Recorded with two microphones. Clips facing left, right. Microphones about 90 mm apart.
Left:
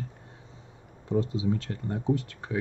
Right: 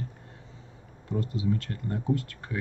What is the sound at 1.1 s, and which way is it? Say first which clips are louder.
Speech: left 2 dB; 25° left (ahead or behind).